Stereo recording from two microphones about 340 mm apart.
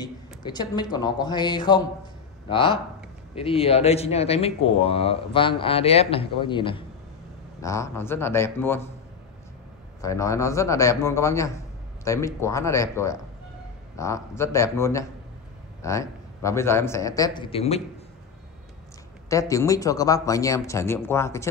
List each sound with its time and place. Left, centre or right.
0.0 s speech: centre
10.0 s speech: centre
19.2 s speech: centre